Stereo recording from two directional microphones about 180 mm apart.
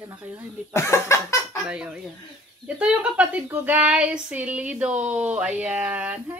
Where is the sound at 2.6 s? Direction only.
5° right (ahead or behind).